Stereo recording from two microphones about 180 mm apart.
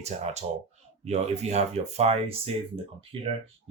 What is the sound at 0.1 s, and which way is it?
Speech, 40° right (ahead or behind).